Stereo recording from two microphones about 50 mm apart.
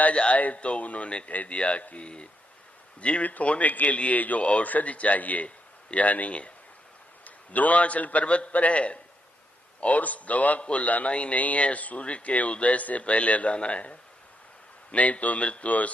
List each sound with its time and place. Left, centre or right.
0.1 s a man's voice: left